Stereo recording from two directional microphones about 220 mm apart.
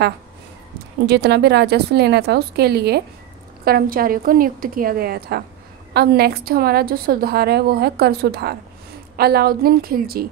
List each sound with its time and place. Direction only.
1.0 s a woman's voice: 50° right (ahead or behind)